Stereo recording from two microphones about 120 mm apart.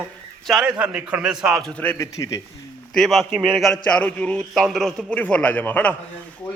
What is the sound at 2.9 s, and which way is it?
A man's voice, centre (ahead or behind).